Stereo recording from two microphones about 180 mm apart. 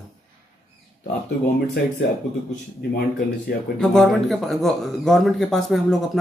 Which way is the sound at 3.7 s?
Centre (ahead or behind).